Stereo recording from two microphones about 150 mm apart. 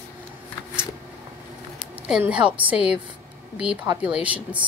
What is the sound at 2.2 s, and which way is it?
A woman's voice, 10° right (ahead or behind).